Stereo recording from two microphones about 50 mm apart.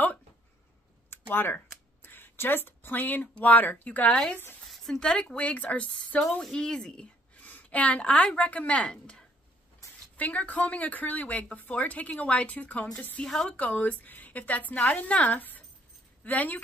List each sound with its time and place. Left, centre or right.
1.1 s computer keyboard: left
2.0 s speech: left
4.1 s speech: centre
4.6 s a sound: centre
5.0 s speech: centre
7.4 s a woman's voice: left
8.8 s speech: centre
10.1 s speech: left
13.2 s speech: centre
13.6 s speech: left